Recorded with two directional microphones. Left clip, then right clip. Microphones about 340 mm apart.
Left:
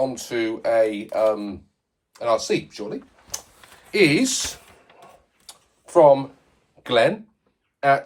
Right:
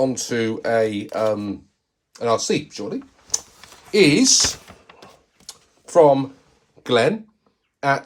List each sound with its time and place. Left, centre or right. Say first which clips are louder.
0.0 s speech: right 3 dB; right
5.5 s computer keyboard: right 4 dB; right
6.8 s speech: right 1 dB; centre